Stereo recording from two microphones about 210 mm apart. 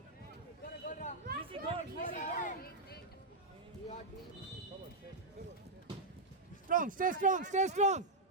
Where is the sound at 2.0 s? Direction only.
35° left (ahead or behind).